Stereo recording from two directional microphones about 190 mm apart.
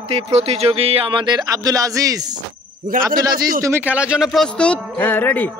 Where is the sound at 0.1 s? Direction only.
35° right (ahead or behind).